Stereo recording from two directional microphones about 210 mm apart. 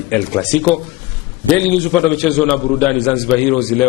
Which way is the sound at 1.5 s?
5° left (ahead or behind).